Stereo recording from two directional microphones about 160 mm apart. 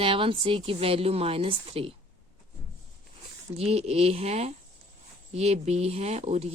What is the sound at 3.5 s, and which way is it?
Speech, 40° right (ahead or behind).